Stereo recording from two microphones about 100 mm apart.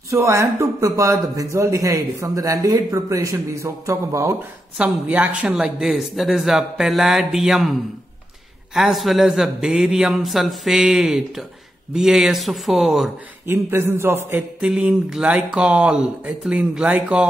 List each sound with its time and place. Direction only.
0.1 s speech: 30° right (ahead or behind)
4.7 s a man's voice: 15° right (ahead or behind)
13.5 s a man's voice: 25° right (ahead or behind)
14.6 s speech: 10° right (ahead or behind)